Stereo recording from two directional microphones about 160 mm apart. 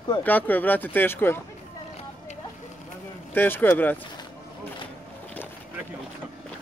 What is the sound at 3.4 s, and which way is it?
Speech, 10° left (ahead or behind).